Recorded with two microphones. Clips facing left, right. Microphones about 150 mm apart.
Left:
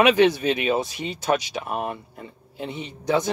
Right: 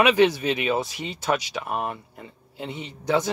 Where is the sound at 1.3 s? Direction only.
35° left (ahead or behind).